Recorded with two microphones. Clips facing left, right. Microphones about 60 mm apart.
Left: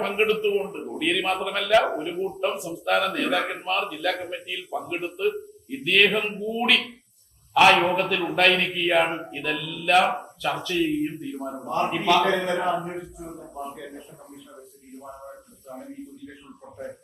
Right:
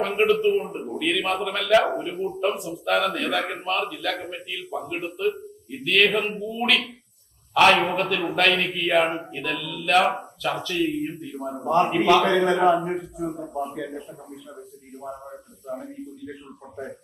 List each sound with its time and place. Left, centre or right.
0.0 s a man's voice: centre
12.2 s a man's voice: right